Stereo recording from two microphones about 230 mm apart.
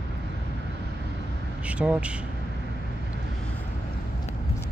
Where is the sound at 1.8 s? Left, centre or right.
Centre.